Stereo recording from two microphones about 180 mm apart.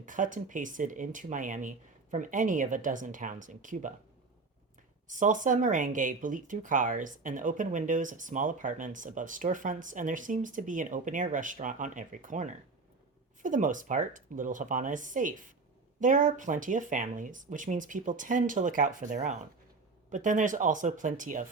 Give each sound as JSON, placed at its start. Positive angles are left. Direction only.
{"t": 0.0, "sound": "speech", "side_deg": -45}
{"t": 5.0, "sound": "speech", "side_deg": -45}